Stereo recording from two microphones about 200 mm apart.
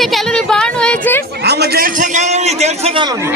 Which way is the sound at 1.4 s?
55° right (ahead or behind).